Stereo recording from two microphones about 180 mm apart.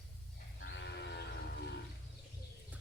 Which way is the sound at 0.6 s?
70° left (ahead or behind).